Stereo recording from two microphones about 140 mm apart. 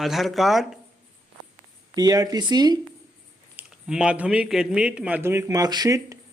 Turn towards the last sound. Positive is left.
turn(degrees=-25)  # may be behind; listen again after turning